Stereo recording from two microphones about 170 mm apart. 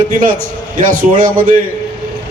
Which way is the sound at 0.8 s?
55° right (ahead or behind).